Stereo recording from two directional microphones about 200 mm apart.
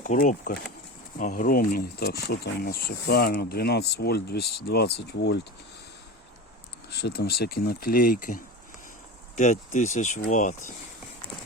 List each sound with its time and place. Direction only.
0.0 s speech: 40° left (ahead or behind); by 5.4 s 55° left (ahead or behind)
6.9 s speech: 55° left (ahead or behind)